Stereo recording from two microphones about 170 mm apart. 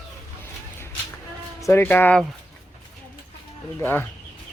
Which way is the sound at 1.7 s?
10° left (ahead or behind).